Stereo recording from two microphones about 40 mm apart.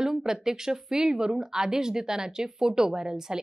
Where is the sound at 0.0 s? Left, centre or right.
Centre.